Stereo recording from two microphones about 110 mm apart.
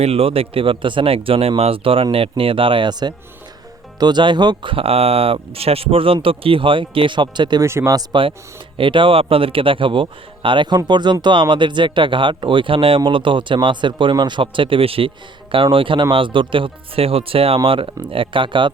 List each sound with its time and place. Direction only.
0.0 s speech: 60° right (ahead or behind); by 7.6 s 45° right (ahead or behind)
7.6 s speech: 25° right (ahead or behind)
7.9 s speech: 50° right (ahead or behind)